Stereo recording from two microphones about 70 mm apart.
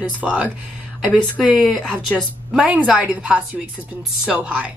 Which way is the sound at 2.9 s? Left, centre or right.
Centre.